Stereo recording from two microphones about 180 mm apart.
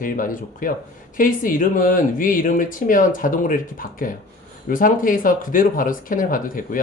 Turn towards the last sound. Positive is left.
turn(degrees=50)  # may be behind; listen again after turning